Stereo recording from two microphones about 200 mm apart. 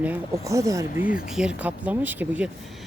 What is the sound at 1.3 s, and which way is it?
Speech, 5° right (ahead or behind).